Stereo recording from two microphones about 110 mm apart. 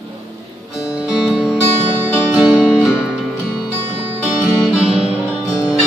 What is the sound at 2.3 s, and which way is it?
Guitar, 5° right (ahead or behind).